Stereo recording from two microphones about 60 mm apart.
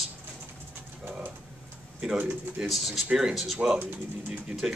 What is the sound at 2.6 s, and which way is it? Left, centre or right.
Speech, centre.